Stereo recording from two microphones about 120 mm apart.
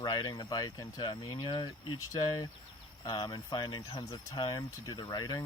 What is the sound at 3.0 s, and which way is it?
Speech, 35° left (ahead or behind).